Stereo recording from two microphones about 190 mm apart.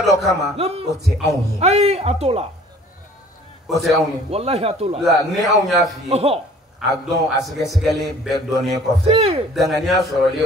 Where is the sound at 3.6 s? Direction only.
Centre (ahead or behind).